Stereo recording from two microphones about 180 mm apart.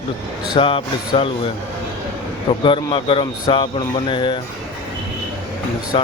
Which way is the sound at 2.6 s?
30° left (ahead or behind).